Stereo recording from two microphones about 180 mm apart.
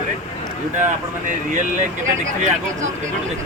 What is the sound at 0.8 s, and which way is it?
Speech, 45° right (ahead or behind).